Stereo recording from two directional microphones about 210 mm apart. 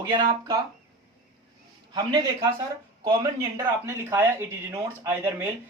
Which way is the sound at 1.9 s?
20° right (ahead or behind).